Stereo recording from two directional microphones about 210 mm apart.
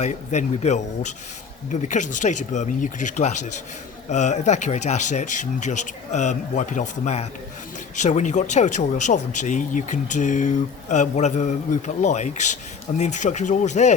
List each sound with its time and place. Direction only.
0.0 s speech: 35° left (ahead or behind)